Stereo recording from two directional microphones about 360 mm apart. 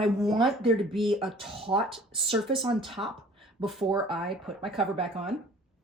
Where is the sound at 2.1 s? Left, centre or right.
Centre.